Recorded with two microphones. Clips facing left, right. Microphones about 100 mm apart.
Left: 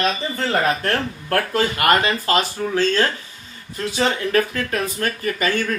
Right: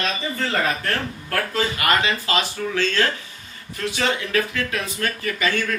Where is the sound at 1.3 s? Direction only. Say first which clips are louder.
Left 4 dB; 50° left (ahead or behind); by 4.1 s 30° left (ahead or behind).